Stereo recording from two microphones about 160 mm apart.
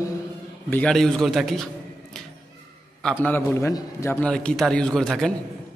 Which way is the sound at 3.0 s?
10° left (ahead or behind).